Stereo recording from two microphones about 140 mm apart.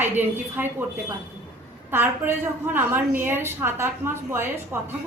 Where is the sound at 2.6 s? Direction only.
15° right (ahead or behind).